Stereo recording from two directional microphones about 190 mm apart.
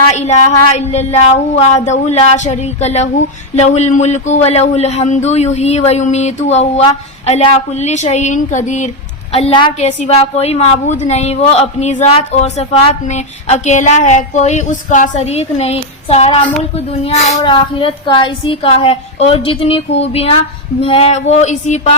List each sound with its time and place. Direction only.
0.1 s a sound: 35° left (ahead or behind)
1.5 s a woman's voice: 35° left (ahead or behind)
9.3 s a woman's voice: 30° left (ahead or behind)